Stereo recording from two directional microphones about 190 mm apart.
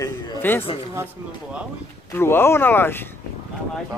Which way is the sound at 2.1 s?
10° left (ahead or behind).